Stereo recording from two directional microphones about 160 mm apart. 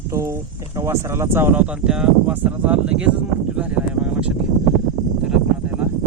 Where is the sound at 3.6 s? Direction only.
5° right (ahead or behind).